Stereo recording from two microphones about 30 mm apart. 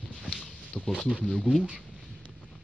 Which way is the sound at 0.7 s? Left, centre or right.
Left.